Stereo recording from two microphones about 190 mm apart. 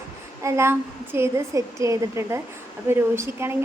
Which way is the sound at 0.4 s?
15° right (ahead or behind).